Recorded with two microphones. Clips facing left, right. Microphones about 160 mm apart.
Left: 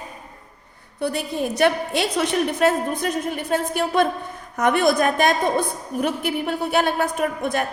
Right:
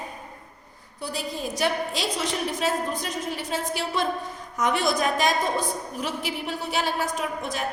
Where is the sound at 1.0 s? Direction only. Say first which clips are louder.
Left 7 dB; 65° left (ahead or behind).